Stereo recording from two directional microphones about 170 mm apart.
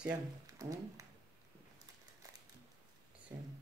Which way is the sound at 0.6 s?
20° right (ahead or behind).